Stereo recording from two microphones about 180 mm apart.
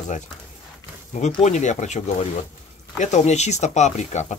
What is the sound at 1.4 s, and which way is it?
Speech, 40° left (ahead or behind).